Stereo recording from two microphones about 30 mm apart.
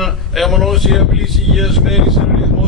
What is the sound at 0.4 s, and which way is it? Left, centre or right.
Speech, centre.